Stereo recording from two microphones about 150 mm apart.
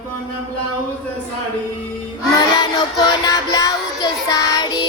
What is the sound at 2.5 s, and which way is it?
Child singing, 30° left (ahead or behind).